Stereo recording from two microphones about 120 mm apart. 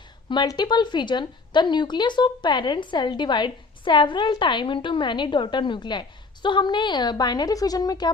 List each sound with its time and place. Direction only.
0.3 s a woman's voice: 40° left (ahead or behind)